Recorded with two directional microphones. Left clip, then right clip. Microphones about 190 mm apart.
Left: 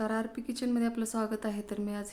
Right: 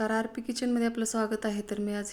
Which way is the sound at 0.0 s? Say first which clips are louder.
Right 4 dB; 10° right (ahead or behind).